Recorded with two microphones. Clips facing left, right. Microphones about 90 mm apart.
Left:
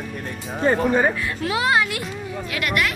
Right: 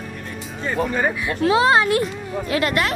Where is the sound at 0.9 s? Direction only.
10° left (ahead or behind).